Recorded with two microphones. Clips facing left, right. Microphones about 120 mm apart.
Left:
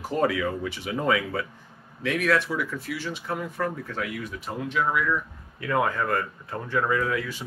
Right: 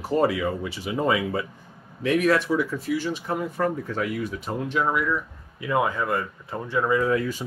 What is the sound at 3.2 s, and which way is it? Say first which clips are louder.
Speech: right 3 dB; 15° right (ahead or behind).